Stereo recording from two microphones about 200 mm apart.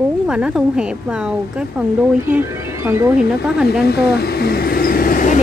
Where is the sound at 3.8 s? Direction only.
50° left (ahead or behind).